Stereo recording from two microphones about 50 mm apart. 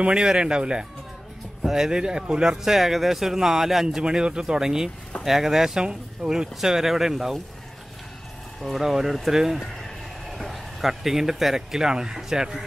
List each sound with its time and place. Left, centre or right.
0.0 s speech: centre
1.6 s music: centre
1.9 s speech: centre
4.0 s speech: centre
8.6 s speech: centre